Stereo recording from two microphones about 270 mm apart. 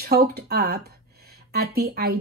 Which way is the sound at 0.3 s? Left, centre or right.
Right.